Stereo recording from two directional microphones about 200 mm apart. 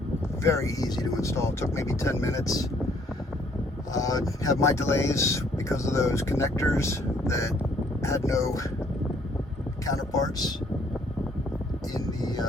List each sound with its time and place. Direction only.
0.4 s speech: 15° left (ahead or behind)
3.9 s speech: 15° left (ahead or behind)
9.8 s speech: 15° left (ahead or behind)
11.9 s music: 20° left (ahead or behind)